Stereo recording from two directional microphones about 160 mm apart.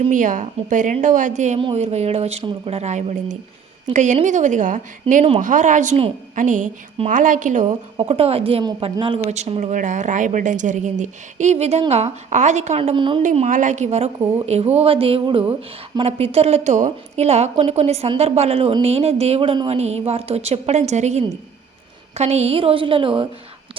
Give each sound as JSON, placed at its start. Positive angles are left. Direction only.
{"t": 0.1, "sound": "speech", "side_deg": -55}
{"t": 1.5, "sound": "a woman's voice", "side_deg": -40}
{"t": 8.0, "sound": "a woman's voice", "side_deg": -40}
{"t": 13.2, "sound": "a woman's voice", "side_deg": -50}